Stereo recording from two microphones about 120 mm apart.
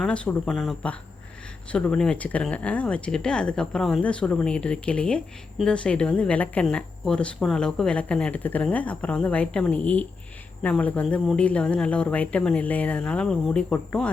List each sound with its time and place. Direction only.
0.0 s speech: 10° left (ahead or behind)